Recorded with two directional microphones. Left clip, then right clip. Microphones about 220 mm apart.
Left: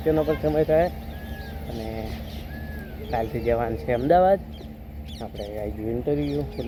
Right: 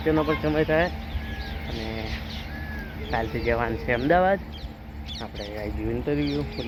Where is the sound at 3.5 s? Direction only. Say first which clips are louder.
Left 1 dB; 5° left (ahead or behind).